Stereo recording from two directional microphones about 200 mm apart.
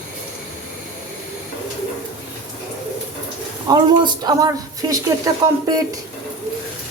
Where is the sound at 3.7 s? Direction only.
20° right (ahead or behind).